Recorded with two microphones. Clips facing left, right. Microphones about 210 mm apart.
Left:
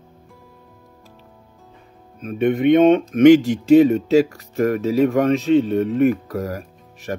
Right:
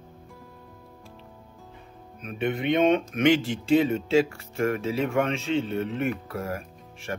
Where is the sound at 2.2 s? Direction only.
45° left (ahead or behind).